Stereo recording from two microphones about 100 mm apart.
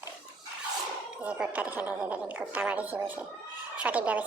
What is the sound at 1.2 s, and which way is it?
A woman's voice, 15° right (ahead or behind).